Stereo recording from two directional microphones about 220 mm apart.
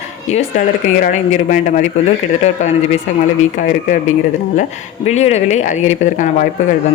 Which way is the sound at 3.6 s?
35° left (ahead or behind).